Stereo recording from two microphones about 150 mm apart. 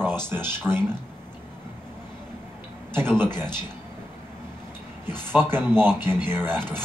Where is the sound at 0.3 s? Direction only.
10° right (ahead or behind).